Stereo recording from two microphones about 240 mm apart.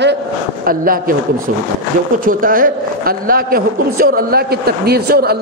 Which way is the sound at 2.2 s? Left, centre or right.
Right.